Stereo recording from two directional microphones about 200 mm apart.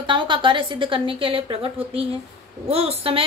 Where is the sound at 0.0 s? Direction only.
25° right (ahead or behind).